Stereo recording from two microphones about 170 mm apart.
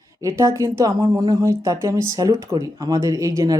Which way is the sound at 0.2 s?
20° right (ahead or behind).